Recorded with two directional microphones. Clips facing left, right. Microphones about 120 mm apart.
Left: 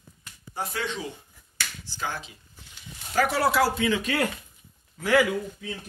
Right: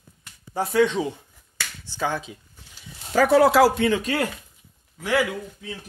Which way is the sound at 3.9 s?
40° right (ahead or behind).